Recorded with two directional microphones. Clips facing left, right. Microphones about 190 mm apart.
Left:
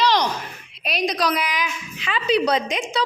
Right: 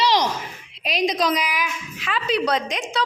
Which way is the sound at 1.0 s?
20° right (ahead or behind).